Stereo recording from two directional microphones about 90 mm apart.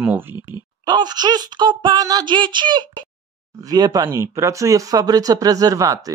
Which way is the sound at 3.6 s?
45° right (ahead or behind).